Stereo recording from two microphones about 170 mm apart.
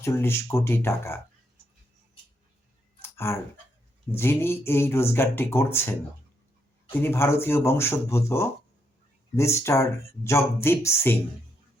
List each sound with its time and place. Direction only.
0.0 s speech: 15° left (ahead or behind)
3.0 s clicking: 15° left (ahead or behind)
4.1 s speech: 15° left (ahead or behind)
7.0 s speech: 15° left (ahead or behind)